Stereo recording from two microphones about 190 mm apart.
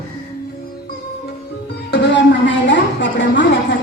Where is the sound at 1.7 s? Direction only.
65° left (ahead or behind).